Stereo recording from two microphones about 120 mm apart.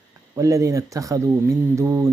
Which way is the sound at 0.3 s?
25° right (ahead or behind).